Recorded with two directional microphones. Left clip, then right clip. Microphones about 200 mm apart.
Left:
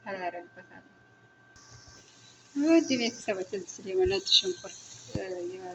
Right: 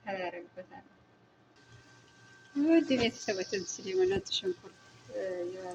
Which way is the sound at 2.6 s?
Centre (ahead or behind).